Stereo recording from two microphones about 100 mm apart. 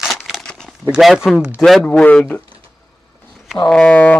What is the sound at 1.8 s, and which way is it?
Speech, 15° left (ahead or behind).